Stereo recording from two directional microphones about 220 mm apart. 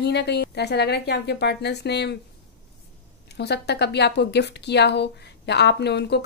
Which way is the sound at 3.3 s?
50° left (ahead or behind).